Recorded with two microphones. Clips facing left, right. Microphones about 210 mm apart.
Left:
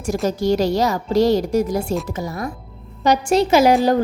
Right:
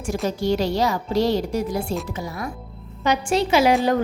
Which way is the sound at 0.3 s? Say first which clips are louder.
Left 4 dB; 45° left (ahead or behind).